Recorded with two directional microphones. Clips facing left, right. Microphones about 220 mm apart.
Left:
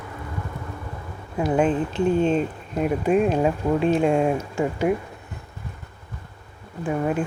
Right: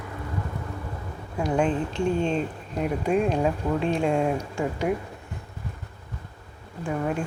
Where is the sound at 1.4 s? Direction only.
5° left (ahead or behind).